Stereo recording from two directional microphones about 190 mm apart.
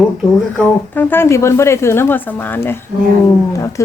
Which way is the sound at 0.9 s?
10° left (ahead or behind).